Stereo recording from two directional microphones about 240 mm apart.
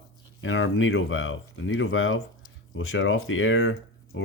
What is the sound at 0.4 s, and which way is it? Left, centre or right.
Speech, left.